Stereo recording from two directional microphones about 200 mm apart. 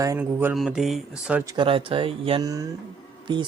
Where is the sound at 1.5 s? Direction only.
25° right (ahead or behind).